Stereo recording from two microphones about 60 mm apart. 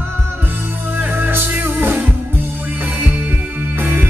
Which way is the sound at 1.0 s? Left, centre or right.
Right.